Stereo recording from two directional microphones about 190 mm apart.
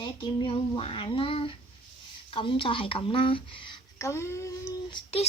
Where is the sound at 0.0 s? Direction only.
25° left (ahead or behind).